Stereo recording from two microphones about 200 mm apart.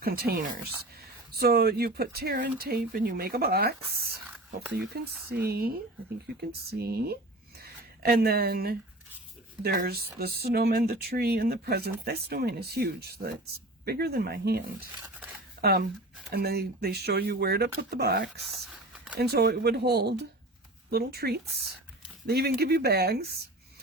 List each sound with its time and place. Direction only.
0.0 s speech: 50° right (ahead or behind)
7.6 s a sound: 50° right (ahead or behind)
9.6 s speech: 50° right (ahead or behind)
16.3 s speech: 50° right (ahead or behind)
18.4 s whispering: centre (ahead or behind)
19.2 s speech: 55° right (ahead or behind)